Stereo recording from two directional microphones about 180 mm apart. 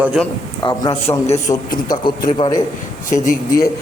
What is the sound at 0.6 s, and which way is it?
A man's voice, 25° left (ahead or behind).